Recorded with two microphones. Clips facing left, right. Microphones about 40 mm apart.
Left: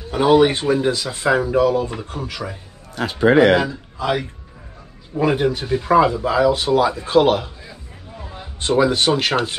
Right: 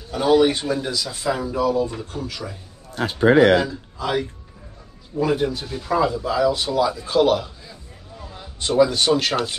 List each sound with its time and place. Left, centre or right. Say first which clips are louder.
0.1 s speech: left 3 dB; left
2.9 s a man's voice: left 1 dB; left
3.5 s a man's voice: left 1 dB; centre
5.1 s speech: left 3 dB; left